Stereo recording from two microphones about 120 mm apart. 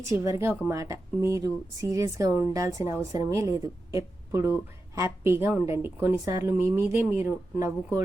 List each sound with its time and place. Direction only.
0.1 s speech: 25° right (ahead or behind)